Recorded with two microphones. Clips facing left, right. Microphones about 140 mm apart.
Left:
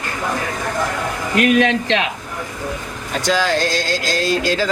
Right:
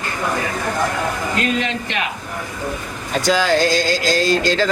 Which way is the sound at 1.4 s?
70° left (ahead or behind).